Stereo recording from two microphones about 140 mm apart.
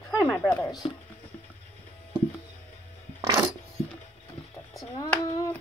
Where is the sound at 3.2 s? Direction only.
25° right (ahead or behind).